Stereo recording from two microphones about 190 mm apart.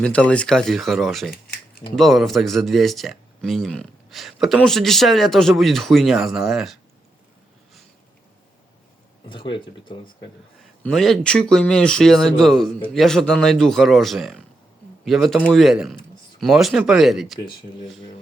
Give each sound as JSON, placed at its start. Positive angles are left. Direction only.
{"t": 0.0, "sound": "speech", "side_deg": 5}
{"t": 9.3, "sound": "speech", "side_deg": 25}
{"t": 10.6, "sound": "speech", "side_deg": 0}